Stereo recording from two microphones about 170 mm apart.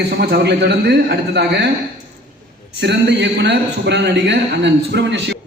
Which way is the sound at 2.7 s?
85° right.